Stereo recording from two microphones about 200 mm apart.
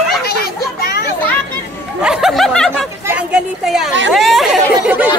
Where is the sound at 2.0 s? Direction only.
5° right (ahead or behind).